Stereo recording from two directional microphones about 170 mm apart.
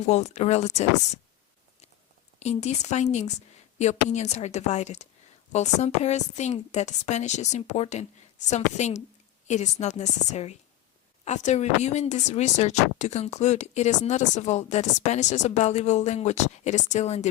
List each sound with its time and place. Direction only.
0.0 s speech: 40° left (ahead or behind)
2.4 s a woman's voice: 40° left (ahead or behind)